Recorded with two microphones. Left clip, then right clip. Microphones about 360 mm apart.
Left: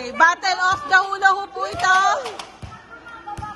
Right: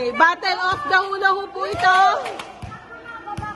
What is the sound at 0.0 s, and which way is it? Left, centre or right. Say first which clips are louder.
Speech: even; centre.